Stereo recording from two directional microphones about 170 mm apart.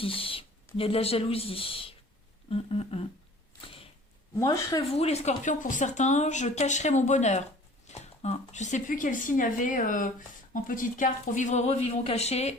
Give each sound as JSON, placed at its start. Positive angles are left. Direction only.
{"t": 0.0, "sound": "speech", "side_deg": 35}
{"t": 2.5, "sound": "humming", "side_deg": 35}
{"t": 3.6, "sound": "a sound", "side_deg": 30}
{"t": 4.4, "sound": "speech", "side_deg": 20}
{"t": 4.9, "sound": "humming", "side_deg": 40}
{"t": 5.4, "sound": "speech", "side_deg": 50}